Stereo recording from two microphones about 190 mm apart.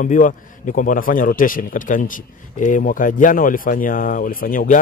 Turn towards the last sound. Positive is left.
turn(degrees=45)  # may be behind; listen again after turning